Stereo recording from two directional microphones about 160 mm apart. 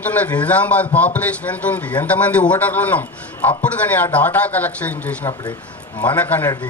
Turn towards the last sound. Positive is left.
turn(degrees=10)  # may be behind; listen again after turning